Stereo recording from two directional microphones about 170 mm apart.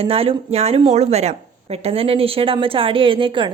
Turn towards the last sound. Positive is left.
turn(degrees=-30)  # may be behind; listen again after turning